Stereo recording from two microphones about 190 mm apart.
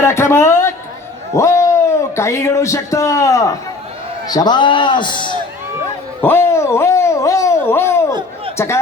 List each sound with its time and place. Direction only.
0.0 s a man's voice: 15° left (ahead or behind)
6.2 s a sound: 10° left (ahead or behind)
8.5 s speech: 15° left (ahead or behind)